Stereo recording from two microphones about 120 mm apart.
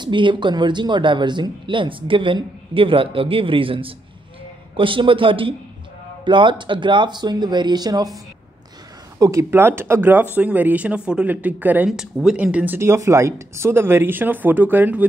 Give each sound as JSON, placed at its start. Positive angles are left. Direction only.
{"t": 0.0, "sound": "speech", "side_deg": -45}
{"t": 9.2, "sound": "speech", "side_deg": -25}